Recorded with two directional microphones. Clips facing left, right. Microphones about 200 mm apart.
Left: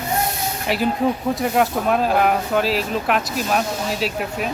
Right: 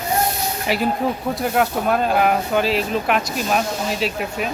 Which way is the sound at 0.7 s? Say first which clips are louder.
Left 1 dB; centre (ahead or behind).